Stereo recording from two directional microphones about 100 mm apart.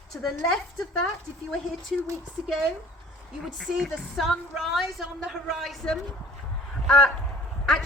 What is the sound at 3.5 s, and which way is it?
A woman's voice, centre (ahead or behind).